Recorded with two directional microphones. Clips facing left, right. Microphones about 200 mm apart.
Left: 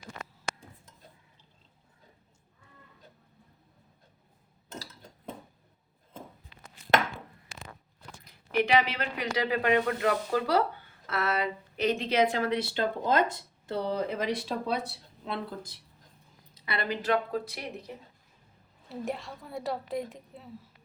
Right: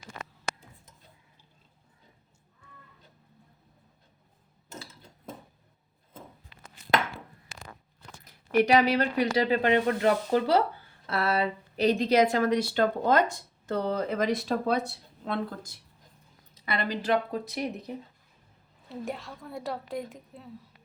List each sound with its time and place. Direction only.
8.2 s a woman's voice: 45° right (ahead or behind)
16.7 s a woman's voice: 35° right (ahead or behind)
17.3 s speech: 20° right (ahead or behind)
18.9 s a woman's voice: centre (ahead or behind)